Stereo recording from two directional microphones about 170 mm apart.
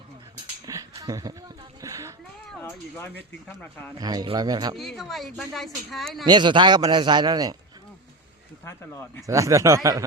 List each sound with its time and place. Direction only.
0.6 s a sound: 20° right (ahead or behind)
2.6 s speech: 15° left (ahead or behind)
4.0 s a man's voice: 25° right (ahead or behind)
4.8 s speech: centre (ahead or behind)
6.2 s a man's voice: 25° right (ahead or behind)
8.6 s speech: 15° left (ahead or behind)
9.2 s a man's voice: 20° right (ahead or behind)